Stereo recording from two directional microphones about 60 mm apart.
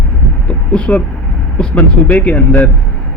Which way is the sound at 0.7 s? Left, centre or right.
Centre.